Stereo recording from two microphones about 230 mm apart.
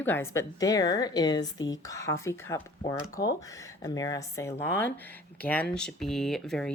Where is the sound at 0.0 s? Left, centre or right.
Centre.